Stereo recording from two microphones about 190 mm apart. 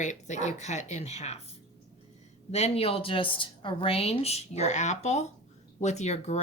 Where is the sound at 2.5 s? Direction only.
35° left (ahead or behind).